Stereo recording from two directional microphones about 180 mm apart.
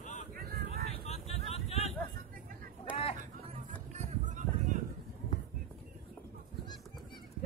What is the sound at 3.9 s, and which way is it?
Run, 40° right (ahead or behind).